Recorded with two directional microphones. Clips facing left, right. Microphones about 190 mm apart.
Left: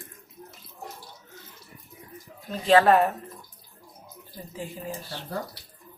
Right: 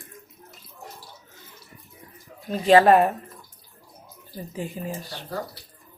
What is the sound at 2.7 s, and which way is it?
Speech, 15° right (ahead or behind).